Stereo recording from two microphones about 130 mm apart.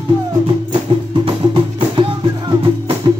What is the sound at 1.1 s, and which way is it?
Music, 40° right (ahead or behind).